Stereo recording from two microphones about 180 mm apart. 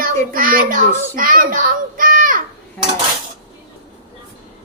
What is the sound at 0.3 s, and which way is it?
Child singing, 50° right (ahead or behind).